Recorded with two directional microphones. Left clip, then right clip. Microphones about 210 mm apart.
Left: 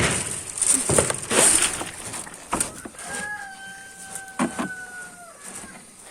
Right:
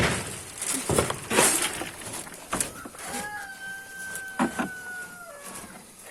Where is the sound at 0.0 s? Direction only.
40° left (ahead or behind).